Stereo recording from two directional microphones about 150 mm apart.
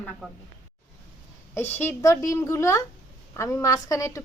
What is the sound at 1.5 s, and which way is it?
A woman's voice, 15° left (ahead or behind).